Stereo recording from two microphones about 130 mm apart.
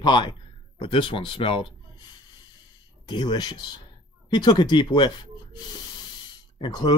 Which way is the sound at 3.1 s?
35° left (ahead or behind).